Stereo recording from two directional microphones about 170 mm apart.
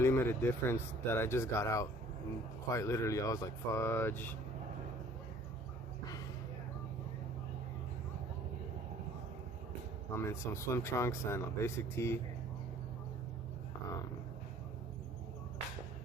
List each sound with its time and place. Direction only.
0.0 s speech: 15° left (ahead or behind)
10.2 s speech: 15° left (ahead or behind)